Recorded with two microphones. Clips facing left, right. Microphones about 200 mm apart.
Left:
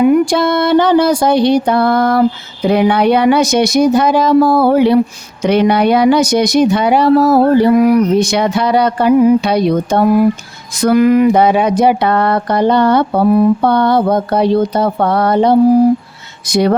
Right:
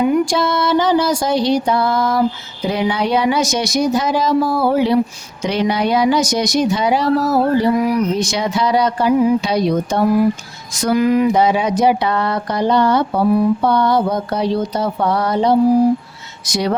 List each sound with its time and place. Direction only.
0.0 s speech: 60° left (ahead or behind)